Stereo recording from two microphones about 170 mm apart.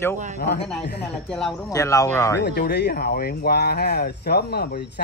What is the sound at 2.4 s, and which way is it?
Speech, 70° left (ahead or behind).